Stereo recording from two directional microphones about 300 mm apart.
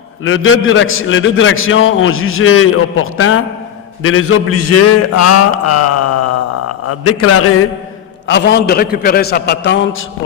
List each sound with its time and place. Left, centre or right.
0.2 s a man's voice: left
8.3 s a man's voice: left